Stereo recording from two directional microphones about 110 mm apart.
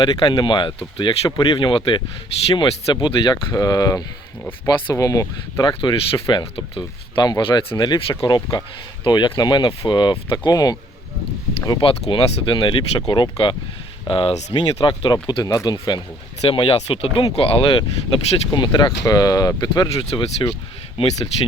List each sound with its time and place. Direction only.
0.0 s speech: 45° left (ahead or behind)
11.8 s speech: 55° left (ahead or behind)
15.4 s speech: 35° left (ahead or behind)
16.5 s speech: 50° left (ahead or behind)
21.0 s speech: 55° left (ahead or behind)